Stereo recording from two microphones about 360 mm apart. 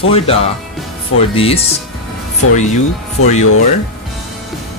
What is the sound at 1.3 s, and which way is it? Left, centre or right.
Music, centre.